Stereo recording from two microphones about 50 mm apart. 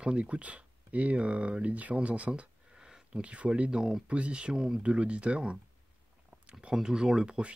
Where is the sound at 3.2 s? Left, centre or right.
Right.